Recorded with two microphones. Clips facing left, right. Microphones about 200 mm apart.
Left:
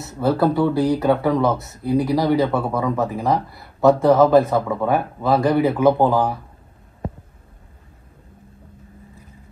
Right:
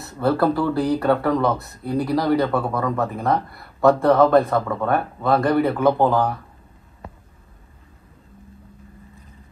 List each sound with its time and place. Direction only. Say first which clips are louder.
0.0 s speech: left 1 dB; centre (ahead or behind)